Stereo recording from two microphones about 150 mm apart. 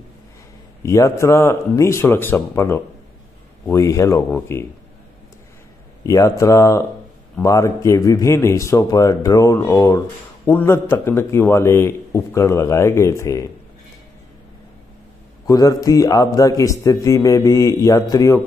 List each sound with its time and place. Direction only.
0.8 s speech: 20° left (ahead or behind)
6.0 s speech: 20° left (ahead or behind)
15.4 s speech: 25° left (ahead or behind)